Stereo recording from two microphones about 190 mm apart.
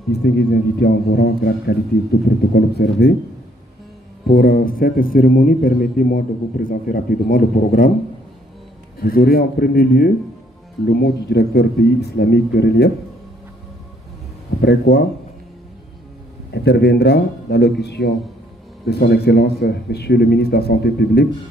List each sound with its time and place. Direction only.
0.1 s speech: 60° left (ahead or behind)
4.3 s a man's voice: 50° left (ahead or behind)
9.0 s a man's voice: 50° left (ahead or behind)
14.6 s speech: 65° left (ahead or behind)
16.5 s speech: 60° left (ahead or behind)